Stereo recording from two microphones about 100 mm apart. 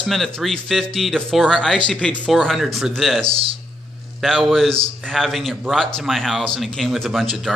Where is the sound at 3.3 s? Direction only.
70° right (ahead or behind).